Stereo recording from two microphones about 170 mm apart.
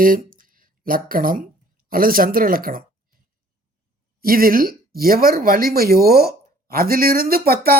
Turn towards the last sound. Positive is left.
turn(degrees=-60)  # may be behind; listen again after turning